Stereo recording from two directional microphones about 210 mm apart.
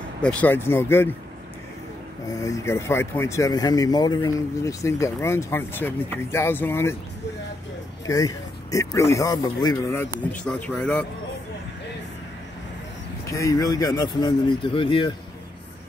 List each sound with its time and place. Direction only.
0.2 s speech: 5° left (ahead or behind)
2.3 s speech: 15° left (ahead or behind)
8.1 s speech: 15° left (ahead or behind)
13.3 s speech: 15° left (ahead or behind)